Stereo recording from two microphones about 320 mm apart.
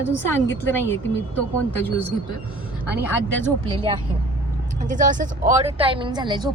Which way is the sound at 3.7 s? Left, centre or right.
Centre.